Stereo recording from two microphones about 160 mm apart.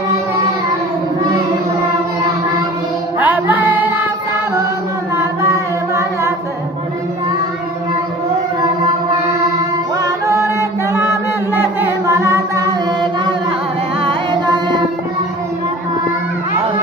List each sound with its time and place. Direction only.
3.2 s music: 10° right (ahead or behind)
5.1 s a sound: 15° right (ahead or behind)
10.0 s chant: 20° right (ahead or behind)
14.0 s music: 30° right (ahead or behind)